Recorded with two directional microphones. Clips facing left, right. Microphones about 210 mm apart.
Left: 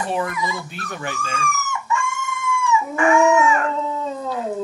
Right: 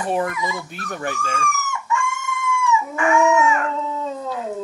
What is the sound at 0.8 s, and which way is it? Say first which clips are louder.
Speech: right 4 dB; 45° right (ahead or behind).